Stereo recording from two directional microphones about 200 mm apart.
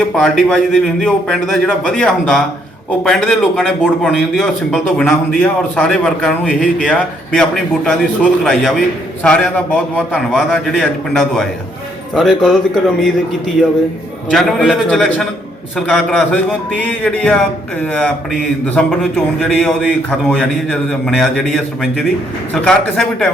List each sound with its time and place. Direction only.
0.2 s speech: 5° left (ahead or behind)
14.3 s speech: centre (ahead or behind)